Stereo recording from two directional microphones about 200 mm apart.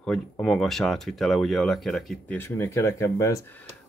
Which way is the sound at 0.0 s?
5° left (ahead or behind).